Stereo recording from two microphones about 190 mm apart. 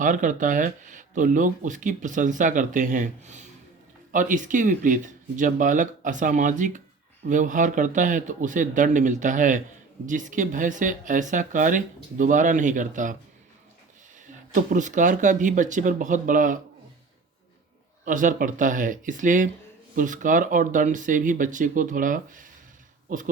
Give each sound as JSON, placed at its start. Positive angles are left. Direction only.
{"t": 0.0, "sound": "speech", "side_deg": -40}
{"t": 14.5, "sound": "speech", "side_deg": -40}
{"t": 18.0, "sound": "speech", "side_deg": -45}